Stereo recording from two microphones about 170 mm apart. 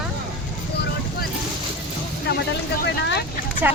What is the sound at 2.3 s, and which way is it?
Vehicle, 70° left (ahead or behind).